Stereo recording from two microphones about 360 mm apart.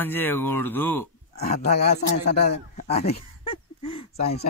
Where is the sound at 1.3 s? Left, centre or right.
Centre.